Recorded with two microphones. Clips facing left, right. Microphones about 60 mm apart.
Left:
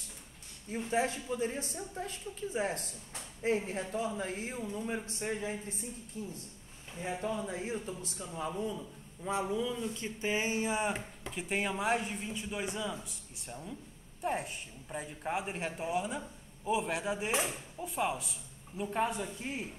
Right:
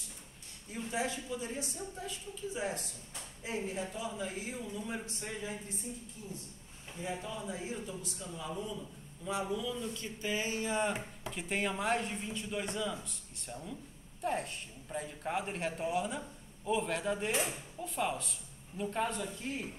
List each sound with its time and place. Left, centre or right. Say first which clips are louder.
0.7 s a man's voice: left 4 dB; left
9.2 s speech: left 3 dB; left; by 11.0 s centre
11.2 s a woman's voice: left 1 dB; centre